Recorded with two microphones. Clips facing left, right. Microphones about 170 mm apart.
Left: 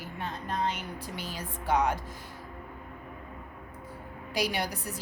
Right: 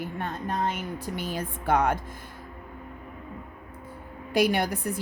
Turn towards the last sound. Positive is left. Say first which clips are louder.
# right 7 dB
turn(degrees=-55)  # may be behind; listen again after turning